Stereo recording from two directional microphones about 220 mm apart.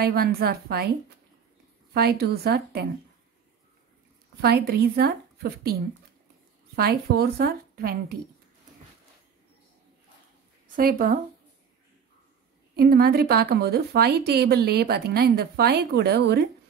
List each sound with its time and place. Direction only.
0.0 s a woman's voice: 45° right (ahead or behind)
2.0 s a woman's voice: 45° right (ahead or behind)
4.4 s a woman's voice: 45° right (ahead or behind)
10.8 s speech: 40° right (ahead or behind)
12.7 s a woman's voice: 45° right (ahead or behind)